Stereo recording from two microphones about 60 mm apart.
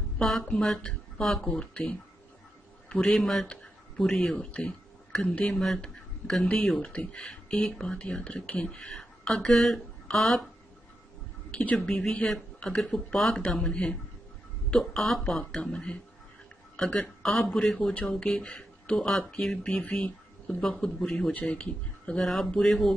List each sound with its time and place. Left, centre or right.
0.2 s speech: centre
3.1 s speech: centre
5.5 s speech: centre
5.8 s a sound: centre
6.8 s speech: centre
8.9 s speech: centre
11.6 s speech: centre
15.5 s speech: centre
19.0 s speech: centre
22.2 s speech: centre